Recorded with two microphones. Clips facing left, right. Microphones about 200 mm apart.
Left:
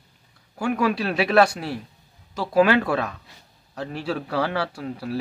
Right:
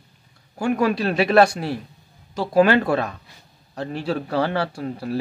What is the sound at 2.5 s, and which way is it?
Speech, centre (ahead or behind).